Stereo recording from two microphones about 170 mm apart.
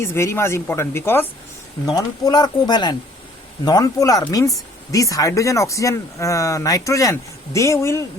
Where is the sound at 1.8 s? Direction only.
25° left (ahead or behind).